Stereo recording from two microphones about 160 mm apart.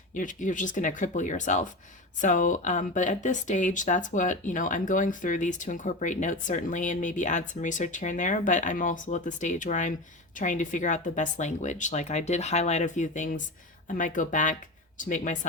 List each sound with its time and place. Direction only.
0.1 s speech: 55° left (ahead or behind)